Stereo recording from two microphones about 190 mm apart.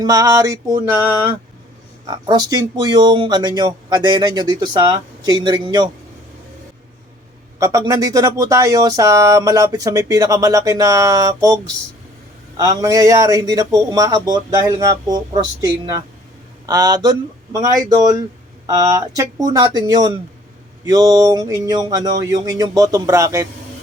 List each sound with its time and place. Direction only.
0.0 s speech: 20° right (ahead or behind)
2.0 s speech: 20° right (ahead or behind)
7.6 s speech: 15° right (ahead or behind)